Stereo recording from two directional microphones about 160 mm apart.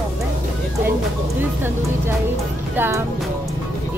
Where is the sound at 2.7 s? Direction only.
15° right (ahead or behind).